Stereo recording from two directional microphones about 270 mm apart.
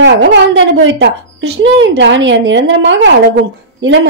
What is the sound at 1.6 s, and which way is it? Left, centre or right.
A woman's voice, right.